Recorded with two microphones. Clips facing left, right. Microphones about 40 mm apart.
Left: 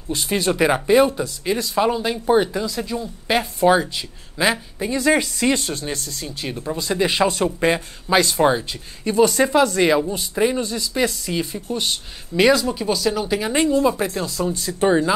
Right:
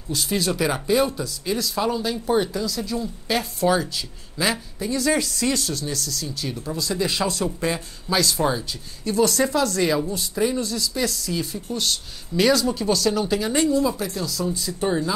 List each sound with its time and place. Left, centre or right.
0.1 s a woman's voice: left
9.4 s a woman's voice: left; by 13.4 s centre
13.4 s a woman's voice: left